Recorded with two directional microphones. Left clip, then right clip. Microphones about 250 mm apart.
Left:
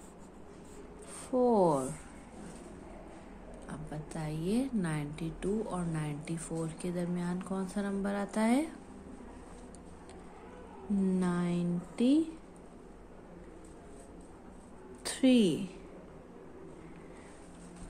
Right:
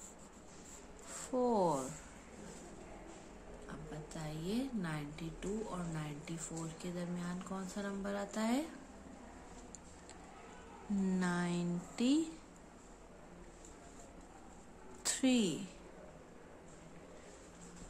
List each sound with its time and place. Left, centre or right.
1.3 s speech: centre
3.6 s a woman's voice: left
11.1 s a sound: centre
15.0 s a woman's voice: centre